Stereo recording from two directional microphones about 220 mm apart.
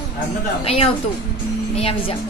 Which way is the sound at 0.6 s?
25° left (ahead or behind).